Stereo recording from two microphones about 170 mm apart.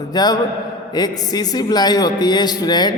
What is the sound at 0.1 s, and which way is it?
A man's voice, 25° left (ahead or behind).